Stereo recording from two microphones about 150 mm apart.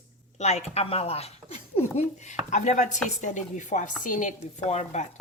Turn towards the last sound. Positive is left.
turn(degrees=50)  # may be behind; listen again after turning